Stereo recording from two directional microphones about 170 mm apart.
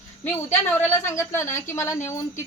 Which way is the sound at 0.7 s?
15° left (ahead or behind).